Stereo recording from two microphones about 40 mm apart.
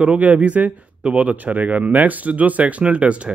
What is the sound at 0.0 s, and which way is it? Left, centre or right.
A man's voice, right.